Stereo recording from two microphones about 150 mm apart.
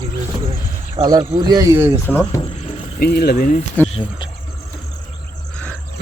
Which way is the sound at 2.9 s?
85° left.